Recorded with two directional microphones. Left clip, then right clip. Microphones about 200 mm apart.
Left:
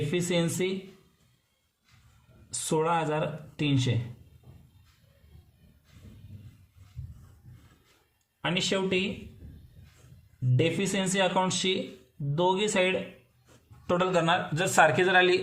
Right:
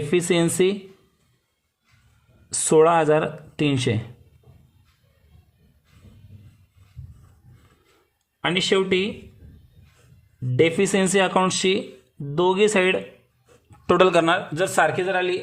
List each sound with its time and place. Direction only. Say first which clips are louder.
0.1 s speech: right 10 dB; 45° right (ahead or behind)
2.5 s speech: right 11 dB; 45° right (ahead or behind)
8.4 s speech: right 8 dB; 45° right (ahead or behind)
10.6 s speech: right 9 dB; 45° right (ahead or behind)
14.2 s a man's voice: right 6 dB; 30° right (ahead or behind)
14.8 s a man's voice: even; centre (ahead or behind)